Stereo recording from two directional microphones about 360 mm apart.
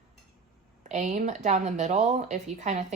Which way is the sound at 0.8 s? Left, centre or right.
Centre.